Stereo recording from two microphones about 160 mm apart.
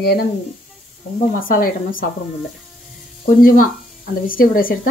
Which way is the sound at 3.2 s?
60° left (ahead or behind).